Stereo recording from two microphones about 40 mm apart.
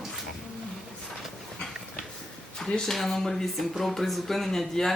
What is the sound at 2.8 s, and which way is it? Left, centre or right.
Speech, centre.